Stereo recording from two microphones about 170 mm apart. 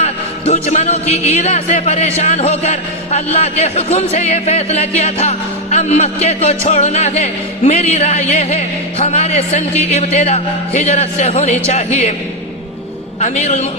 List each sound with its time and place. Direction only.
0.0 s speech: 40° left (ahead or behind)
13.1 s speech: 40° left (ahead or behind)